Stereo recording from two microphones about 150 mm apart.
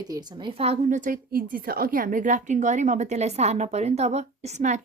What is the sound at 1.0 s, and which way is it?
A woman's voice, 65° right (ahead or behind).